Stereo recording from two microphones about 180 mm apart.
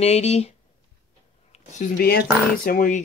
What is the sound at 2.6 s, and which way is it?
Speech, 45° left (ahead or behind).